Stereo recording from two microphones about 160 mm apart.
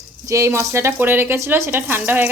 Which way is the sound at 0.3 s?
20° right (ahead or behind).